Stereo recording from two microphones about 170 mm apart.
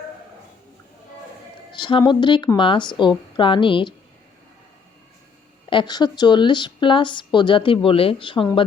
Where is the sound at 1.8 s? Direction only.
25° left (ahead or behind).